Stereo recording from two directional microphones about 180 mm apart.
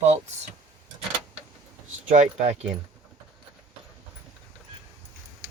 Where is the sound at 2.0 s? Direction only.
40° right (ahead or behind).